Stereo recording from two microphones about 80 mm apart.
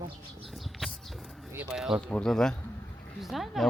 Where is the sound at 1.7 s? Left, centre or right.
Centre.